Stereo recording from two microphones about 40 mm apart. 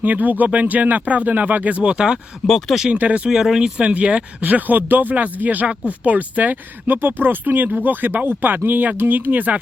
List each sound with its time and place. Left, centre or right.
0.0 s speech: right
1.8 s speech: right
2.5 s speech: centre
2.9 s speech: right
3.2 s speech: centre
3.8 s speech: right
4.4 s speech: right